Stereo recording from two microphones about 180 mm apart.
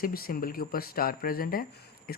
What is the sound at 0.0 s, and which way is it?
Speech, 55° left (ahead or behind).